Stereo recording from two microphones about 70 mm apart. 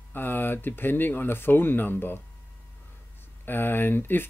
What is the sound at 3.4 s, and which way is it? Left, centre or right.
Speech, left.